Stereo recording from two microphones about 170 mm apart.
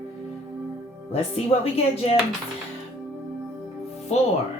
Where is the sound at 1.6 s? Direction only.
35° left (ahead or behind).